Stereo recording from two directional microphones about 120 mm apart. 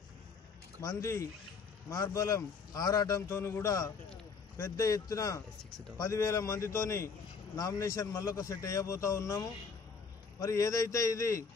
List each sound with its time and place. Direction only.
0.8 s a man's voice: 25° left (ahead or behind)